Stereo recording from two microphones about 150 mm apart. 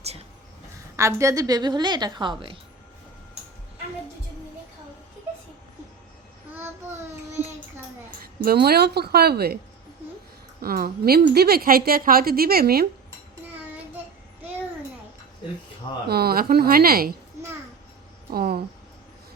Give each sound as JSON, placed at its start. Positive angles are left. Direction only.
{"t": 0.9, "sound": "a woman's voice", "side_deg": -20}
{"t": 8.4, "sound": "a woman's voice", "side_deg": -90}
{"t": 10.6, "sound": "a woman's voice", "side_deg": -80}
{"t": 16.0, "sound": "a woman's voice", "side_deg": -90}
{"t": 18.3, "sound": "a woman's voice", "side_deg": -90}